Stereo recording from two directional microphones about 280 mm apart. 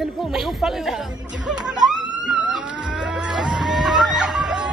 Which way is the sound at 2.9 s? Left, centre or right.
Centre.